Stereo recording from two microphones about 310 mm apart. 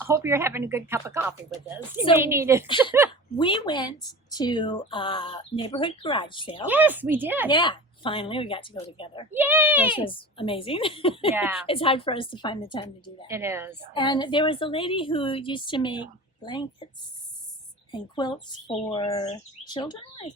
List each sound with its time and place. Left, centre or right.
0.0 s speech: centre
2.6 s speech: centre
6.7 s a woman's voice: centre
7.5 s speech: centre
9.3 s a woman's voice: centre
9.9 s speech: centre
11.3 s a woman's voice: centre
11.6 s speech: centre
13.2 s speech: centre
13.9 s speech: centre
17.9 s speech: centre